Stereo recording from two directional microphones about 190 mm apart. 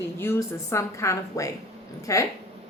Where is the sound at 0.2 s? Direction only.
15° left (ahead or behind).